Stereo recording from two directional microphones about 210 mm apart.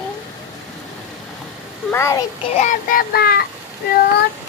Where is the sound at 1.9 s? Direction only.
15° left (ahead or behind).